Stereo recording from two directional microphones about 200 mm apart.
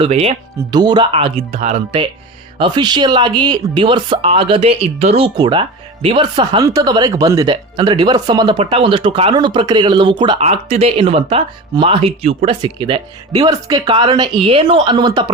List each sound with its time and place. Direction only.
0.0 s speech: 30° right (ahead or behind)